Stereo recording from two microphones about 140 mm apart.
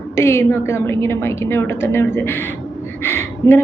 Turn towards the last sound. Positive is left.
turn(degrees=15)  # may be behind; listen again after turning